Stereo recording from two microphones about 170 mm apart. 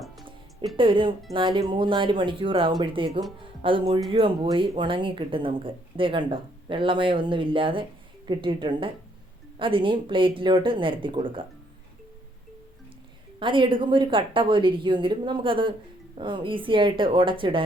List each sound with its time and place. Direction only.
0.8 s speech: 30° right (ahead or behind)
13.4 s speech: 30° right (ahead or behind)